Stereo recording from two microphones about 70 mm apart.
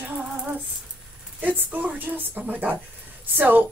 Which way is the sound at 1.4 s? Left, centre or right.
Right.